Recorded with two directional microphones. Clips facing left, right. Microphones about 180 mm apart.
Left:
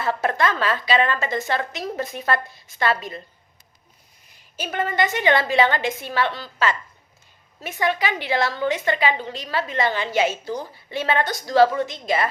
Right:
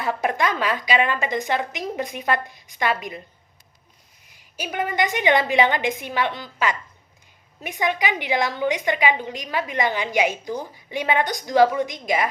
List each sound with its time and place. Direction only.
0.0 s a woman's voice: 15° right (ahead or behind)
4.5 s a woman's voice: 10° right (ahead or behind)